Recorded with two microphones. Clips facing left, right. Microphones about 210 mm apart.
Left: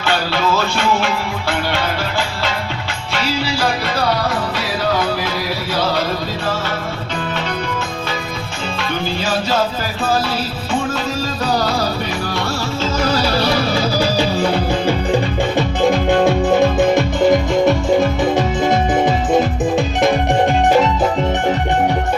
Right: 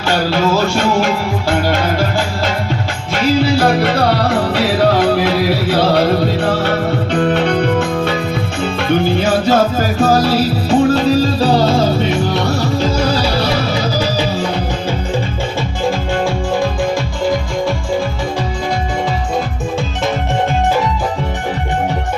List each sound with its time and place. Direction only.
0.8 s music: 45° right (ahead or behind)
3.4 s music: 55° right (ahead or behind); by 12.4 s 20° right (ahead or behind)
15.9 s music: 20° left (ahead or behind)